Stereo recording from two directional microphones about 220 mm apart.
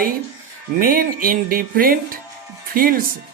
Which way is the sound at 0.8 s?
40° right (ahead or behind).